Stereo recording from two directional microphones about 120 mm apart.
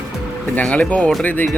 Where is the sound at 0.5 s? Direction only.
10° left (ahead or behind).